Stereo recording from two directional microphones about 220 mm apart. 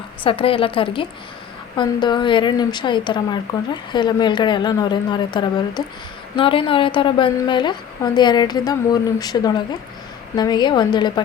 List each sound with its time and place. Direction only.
0.3 s a woman's voice: 25° left (ahead or behind)